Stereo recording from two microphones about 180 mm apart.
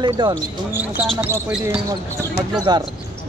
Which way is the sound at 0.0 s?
25° right (ahead or behind).